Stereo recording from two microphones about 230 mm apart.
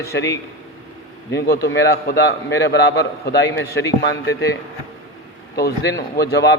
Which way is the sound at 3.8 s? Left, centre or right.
Centre.